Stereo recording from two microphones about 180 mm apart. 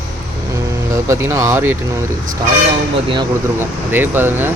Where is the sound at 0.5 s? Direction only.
15° right (ahead or behind).